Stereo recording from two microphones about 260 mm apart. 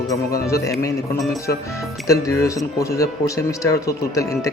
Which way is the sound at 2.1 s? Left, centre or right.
Centre.